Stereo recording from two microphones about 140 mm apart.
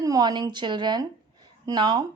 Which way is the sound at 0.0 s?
30° right (ahead or behind).